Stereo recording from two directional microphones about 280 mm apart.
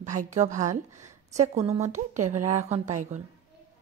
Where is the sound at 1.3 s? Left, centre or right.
Right.